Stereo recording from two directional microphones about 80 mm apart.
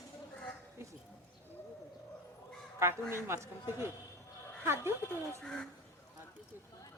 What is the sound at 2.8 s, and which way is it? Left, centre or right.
A woman's voice, right.